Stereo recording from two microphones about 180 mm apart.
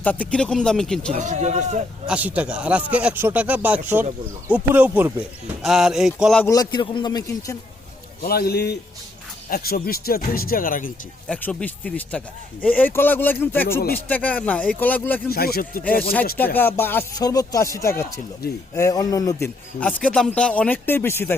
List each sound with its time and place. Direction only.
0.0 s speech: 10° left (ahead or behind)
1.1 s a man's voice: 40° right (ahead or behind)
2.0 s speech: 10° right (ahead or behind)
6.4 s a man's voice: 20° left (ahead or behind)
8.2 s speech: 60° left (ahead or behind)
11.3 s speech: 5° left (ahead or behind)
15.3 s speech: 55° left (ahead or behind)
16.6 s a man's voice: 10° left (ahead or behind)
19.8 s speech: 5° left (ahead or behind)